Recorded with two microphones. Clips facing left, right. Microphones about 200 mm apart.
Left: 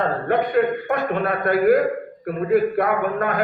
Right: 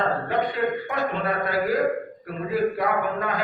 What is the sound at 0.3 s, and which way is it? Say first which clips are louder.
A man's voice: left 5 dB; 55° left (ahead or behind).